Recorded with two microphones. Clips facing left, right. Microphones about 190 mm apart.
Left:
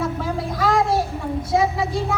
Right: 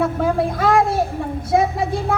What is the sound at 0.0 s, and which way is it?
Child singing, 55° right (ahead or behind).